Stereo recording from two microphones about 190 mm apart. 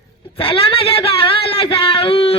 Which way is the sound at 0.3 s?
30° left (ahead or behind).